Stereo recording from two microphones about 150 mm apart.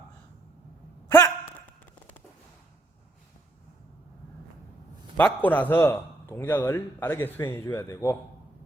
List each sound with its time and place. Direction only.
1.0 s hiccup: 15° left (ahead or behind)
5.1 s a man's voice: 10° left (ahead or behind)